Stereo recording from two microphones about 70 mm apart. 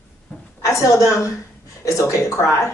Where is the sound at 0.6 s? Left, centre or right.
Left.